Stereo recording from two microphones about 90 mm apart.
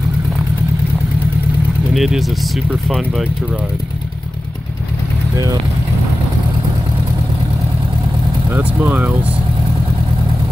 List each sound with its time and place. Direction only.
2.0 s speech: centre (ahead or behind)
8.5 s speech: 20° right (ahead or behind)